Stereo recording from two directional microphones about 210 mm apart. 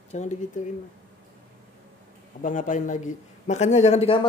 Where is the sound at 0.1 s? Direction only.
35° left (ahead or behind).